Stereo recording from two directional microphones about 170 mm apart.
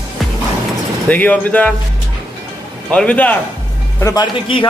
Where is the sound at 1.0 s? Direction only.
10° left (ahead or behind).